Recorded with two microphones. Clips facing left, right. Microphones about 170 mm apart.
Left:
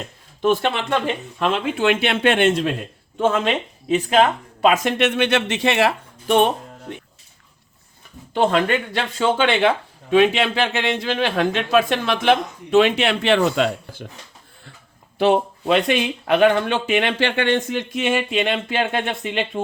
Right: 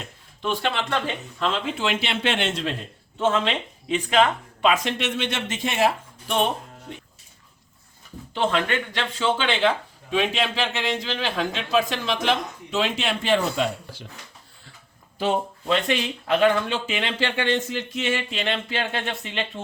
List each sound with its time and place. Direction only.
0.4 s speech: 50° left (ahead or behind)
1.0 s speech: 60° left (ahead or behind)
8.3 s speech: 50° left (ahead or behind)
15.2 s speech: 65° left (ahead or behind)